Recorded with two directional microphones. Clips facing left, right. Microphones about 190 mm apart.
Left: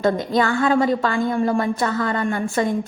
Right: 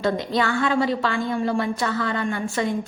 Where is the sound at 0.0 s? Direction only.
40° left (ahead or behind).